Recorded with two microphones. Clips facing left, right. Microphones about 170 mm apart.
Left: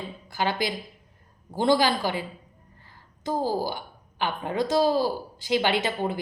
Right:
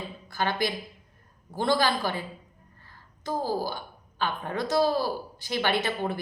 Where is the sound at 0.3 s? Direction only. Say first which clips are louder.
Left 1 dB; 20° left (ahead or behind).